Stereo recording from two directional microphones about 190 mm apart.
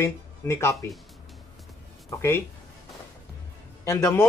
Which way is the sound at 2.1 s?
15° left (ahead or behind).